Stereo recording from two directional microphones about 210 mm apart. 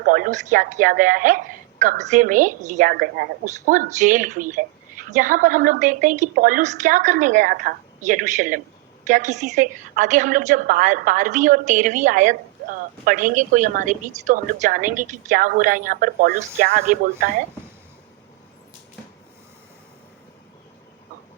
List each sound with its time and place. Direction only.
0.0 s a woman's voice: 40° right (ahead or behind)